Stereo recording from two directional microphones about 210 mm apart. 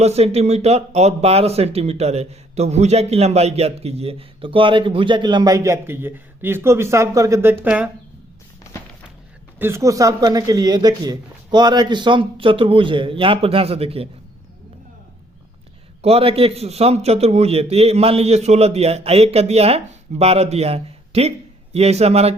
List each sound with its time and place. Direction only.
0.0 s speech: 30° right (ahead or behind); by 7.9 s 5° right (ahead or behind)
9.6 s speech: 10° right (ahead or behind); by 14.1 s 30° right (ahead or behind)
16.0 s speech: 30° right (ahead or behind)